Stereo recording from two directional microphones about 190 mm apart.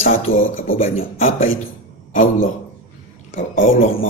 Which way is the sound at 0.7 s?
35° left (ahead or behind).